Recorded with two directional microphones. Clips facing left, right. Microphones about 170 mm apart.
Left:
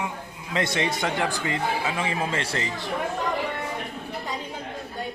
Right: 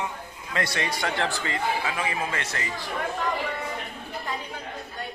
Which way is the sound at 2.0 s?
30° left (ahead or behind).